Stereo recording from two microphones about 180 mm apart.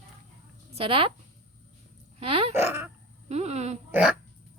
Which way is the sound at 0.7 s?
30° right (ahead or behind).